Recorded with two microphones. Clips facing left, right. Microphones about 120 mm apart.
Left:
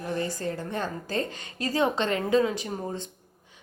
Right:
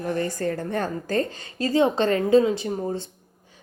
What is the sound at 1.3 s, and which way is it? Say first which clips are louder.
A woman's voice: right 6 dB; 30° right (ahead or behind).